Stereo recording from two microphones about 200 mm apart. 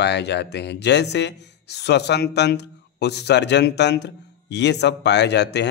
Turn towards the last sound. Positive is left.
turn(degrees=60)  # may be behind; listen again after turning